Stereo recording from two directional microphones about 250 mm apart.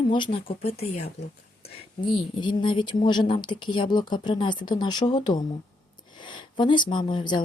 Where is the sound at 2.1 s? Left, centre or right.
Centre.